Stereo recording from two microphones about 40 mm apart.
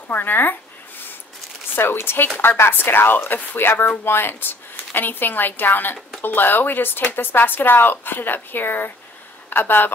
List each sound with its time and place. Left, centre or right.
0.1 s a sound: left
1.8 s a woman's voice: left
4.0 s speech: left
4.9 s a woman's voice: left